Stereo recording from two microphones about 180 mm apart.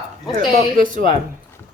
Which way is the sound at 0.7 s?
50° right (ahead or behind).